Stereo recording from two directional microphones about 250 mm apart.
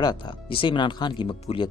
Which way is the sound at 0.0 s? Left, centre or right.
Centre.